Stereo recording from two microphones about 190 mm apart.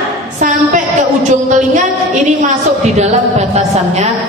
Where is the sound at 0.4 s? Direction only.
45° right (ahead or behind).